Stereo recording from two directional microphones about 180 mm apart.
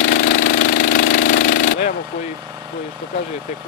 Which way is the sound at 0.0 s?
50° left (ahead or behind).